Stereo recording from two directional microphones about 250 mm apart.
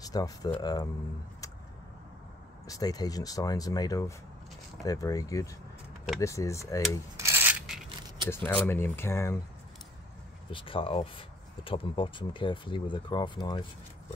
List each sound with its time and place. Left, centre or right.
0.0 s speech: centre
2.6 s speech: centre
7.2 s a sound: centre
8.3 s speech: centre
10.5 s speech: left